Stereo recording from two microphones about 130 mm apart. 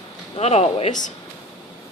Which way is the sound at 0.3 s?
55° left (ahead or behind).